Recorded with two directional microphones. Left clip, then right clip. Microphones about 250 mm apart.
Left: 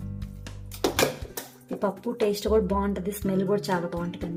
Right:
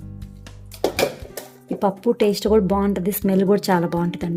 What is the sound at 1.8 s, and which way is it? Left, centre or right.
Speech, right.